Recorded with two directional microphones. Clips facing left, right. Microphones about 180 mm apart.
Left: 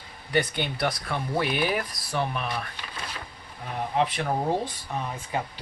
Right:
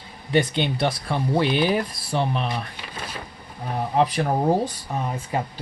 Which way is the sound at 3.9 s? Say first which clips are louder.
Right 5 dB; 40° right (ahead or behind).